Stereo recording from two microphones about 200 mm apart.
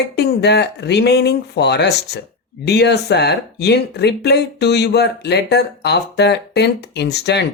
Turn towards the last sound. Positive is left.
turn(degrees=55)  # may be behind; listen again after turning